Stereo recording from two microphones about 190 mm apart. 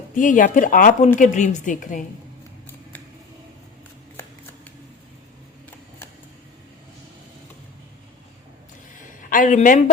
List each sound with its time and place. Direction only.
0.2 s speech: 45° left (ahead or behind)
9.3 s speech: 40° left (ahead or behind)